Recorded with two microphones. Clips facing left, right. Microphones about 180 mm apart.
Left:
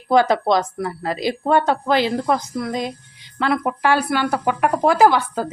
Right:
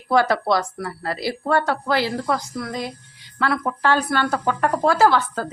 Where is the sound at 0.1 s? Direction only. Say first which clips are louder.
Left 3 dB; 20° left (ahead or behind).